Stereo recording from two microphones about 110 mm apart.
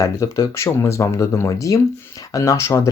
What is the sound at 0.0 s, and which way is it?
Speech, 25° left (ahead or behind).